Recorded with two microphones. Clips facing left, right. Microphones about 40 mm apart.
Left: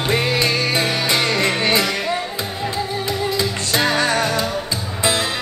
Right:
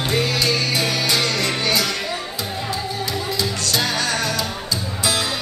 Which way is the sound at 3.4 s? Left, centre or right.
Left.